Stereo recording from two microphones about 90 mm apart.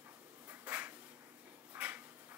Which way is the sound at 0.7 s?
20° right (ahead or behind).